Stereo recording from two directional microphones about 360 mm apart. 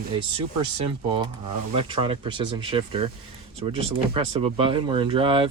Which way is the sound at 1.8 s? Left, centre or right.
Centre.